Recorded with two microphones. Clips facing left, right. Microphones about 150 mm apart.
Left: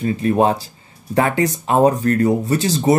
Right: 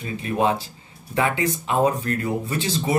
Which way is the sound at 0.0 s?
40° left (ahead or behind).